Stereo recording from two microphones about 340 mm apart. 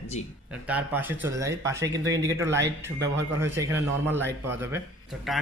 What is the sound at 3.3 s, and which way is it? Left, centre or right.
A man's voice, centre.